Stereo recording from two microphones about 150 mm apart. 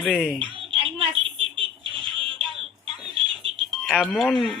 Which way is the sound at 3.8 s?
5° left (ahead or behind).